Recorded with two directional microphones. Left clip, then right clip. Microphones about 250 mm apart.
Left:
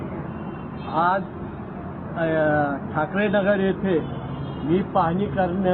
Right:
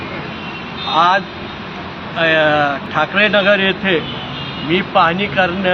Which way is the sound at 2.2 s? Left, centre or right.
Centre.